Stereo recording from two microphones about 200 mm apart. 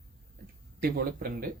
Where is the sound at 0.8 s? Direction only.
50° right (ahead or behind).